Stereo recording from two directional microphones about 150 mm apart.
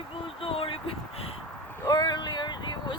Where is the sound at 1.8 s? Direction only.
25° left (ahead or behind).